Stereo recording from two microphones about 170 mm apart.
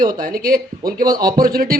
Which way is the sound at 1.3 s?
55° right (ahead or behind).